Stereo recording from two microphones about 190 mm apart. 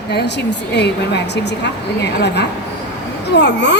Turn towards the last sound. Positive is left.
turn(degrees=65)  # may be behind; listen again after turning